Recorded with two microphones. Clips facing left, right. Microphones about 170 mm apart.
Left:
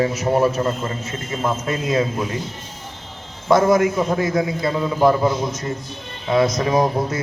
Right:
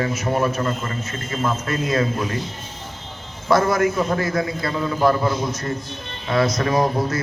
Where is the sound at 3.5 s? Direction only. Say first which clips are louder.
Left 3 dB; 20° left (ahead or behind).